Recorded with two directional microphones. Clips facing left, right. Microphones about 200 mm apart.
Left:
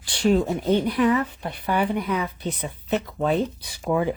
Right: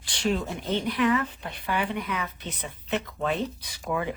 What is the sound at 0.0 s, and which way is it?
Speech, 40° left (ahead or behind).